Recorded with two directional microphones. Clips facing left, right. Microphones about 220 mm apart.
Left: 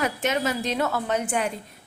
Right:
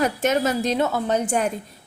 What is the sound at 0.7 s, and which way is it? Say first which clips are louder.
Speech: right 4 dB; 25° right (ahead or behind).